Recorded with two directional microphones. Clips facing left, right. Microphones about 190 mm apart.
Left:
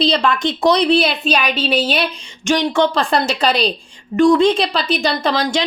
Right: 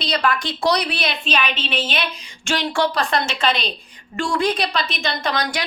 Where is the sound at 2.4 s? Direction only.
15° left (ahead or behind).